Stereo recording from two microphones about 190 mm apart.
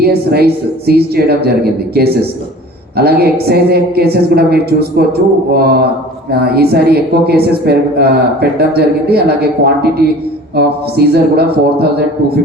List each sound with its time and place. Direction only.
0.0 s a woman's voice: 55° right (ahead or behind)
3.0 s a woman's voice: 55° right (ahead or behind)
10.5 s a woman's voice: 55° right (ahead or behind)